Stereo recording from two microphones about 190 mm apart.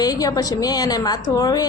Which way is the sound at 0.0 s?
20° left (ahead or behind).